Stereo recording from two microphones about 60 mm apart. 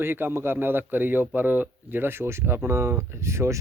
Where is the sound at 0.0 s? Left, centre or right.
Right.